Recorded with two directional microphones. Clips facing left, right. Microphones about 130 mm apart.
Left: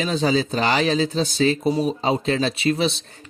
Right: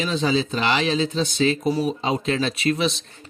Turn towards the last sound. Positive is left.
turn(degrees=35)  # may be behind; listen again after turning